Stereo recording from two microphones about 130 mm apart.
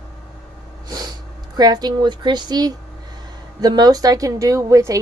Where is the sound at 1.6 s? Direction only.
30° right (ahead or behind).